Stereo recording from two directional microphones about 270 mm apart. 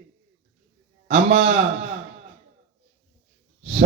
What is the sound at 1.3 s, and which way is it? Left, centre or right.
Speech, right.